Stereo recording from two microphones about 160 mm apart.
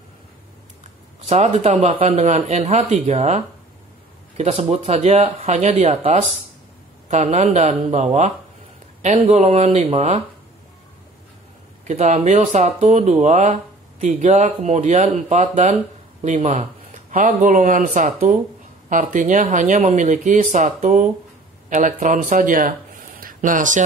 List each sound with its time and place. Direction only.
1.2 s speech: 45° right (ahead or behind)
11.9 s speech: 45° right (ahead or behind)